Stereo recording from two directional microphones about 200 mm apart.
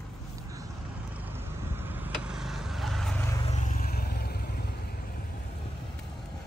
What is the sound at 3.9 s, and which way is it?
Vehicle, 50° left (ahead or behind).